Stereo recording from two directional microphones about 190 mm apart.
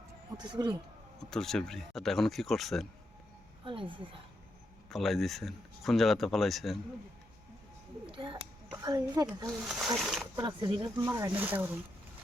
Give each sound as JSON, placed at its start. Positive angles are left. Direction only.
{"t": 0.3, "sound": "speech", "side_deg": -25}
{"t": 1.2, "sound": "speech", "side_deg": 0}
{"t": 3.6, "sound": "speech", "side_deg": -25}
{"t": 4.9, "sound": "speech", "side_deg": 0}
{"t": 8.1, "sound": "speech", "side_deg": -25}
{"t": 9.5, "sound": "speech", "side_deg": 0}
{"t": 10.3, "sound": "speech", "side_deg": -20}